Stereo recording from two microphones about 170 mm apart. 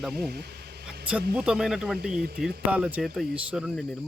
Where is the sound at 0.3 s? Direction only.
70° right (ahead or behind).